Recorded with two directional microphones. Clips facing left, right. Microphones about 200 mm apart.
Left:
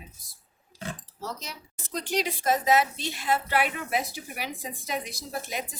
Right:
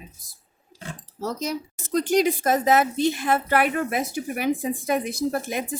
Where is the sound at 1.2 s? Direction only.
45° right (ahead or behind).